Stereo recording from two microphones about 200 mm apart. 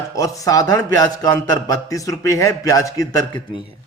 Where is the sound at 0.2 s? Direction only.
15° left (ahead or behind).